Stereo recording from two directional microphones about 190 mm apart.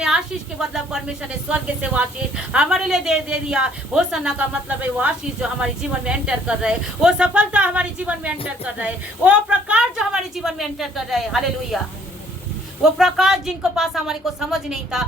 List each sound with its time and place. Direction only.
1.3 s a woman's voice: 5° right (ahead or behind)
12.8 s a woman's voice: centre (ahead or behind)